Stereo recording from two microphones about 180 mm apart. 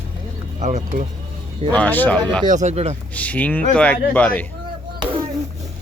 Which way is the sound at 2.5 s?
40° right (ahead or behind).